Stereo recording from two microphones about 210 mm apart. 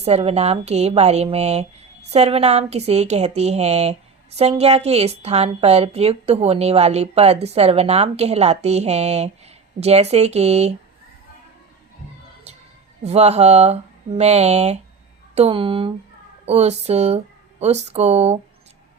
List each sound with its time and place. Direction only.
0.0 s a woman's voice: 30° right (ahead or behind)
12.5 s music: 30° right (ahead or behind)
13.0 s a woman's voice: 30° right (ahead or behind)